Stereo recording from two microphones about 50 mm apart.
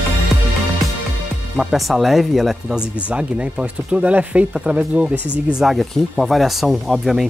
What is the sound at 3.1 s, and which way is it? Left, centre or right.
Speech, right.